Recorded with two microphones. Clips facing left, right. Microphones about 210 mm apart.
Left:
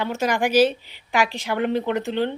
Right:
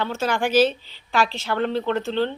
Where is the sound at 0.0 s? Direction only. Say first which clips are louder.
Left 1 dB; 15° left (ahead or behind).